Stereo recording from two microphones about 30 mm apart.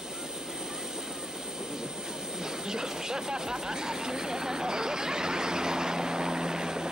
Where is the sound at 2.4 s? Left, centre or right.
Right.